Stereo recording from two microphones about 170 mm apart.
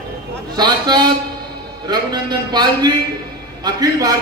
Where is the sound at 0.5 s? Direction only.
25° right (ahead or behind).